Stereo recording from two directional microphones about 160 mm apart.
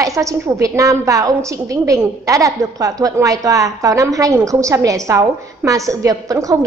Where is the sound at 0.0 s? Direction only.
20° right (ahead or behind).